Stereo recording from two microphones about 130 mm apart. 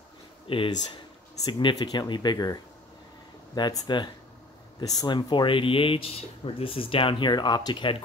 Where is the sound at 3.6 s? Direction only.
35° left (ahead or behind).